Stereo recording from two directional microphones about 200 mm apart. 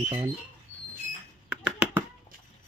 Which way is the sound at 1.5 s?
5° right (ahead or behind).